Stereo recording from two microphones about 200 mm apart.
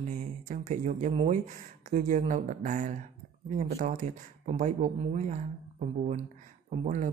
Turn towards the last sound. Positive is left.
turn(degrees=-35)  # may be behind; listen again after turning